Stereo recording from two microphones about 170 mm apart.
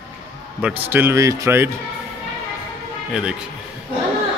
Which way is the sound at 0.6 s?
10° right (ahead or behind).